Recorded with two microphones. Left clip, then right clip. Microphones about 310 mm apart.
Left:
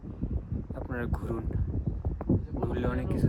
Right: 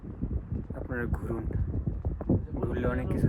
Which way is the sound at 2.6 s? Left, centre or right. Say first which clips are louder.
Right 1 dB; centre.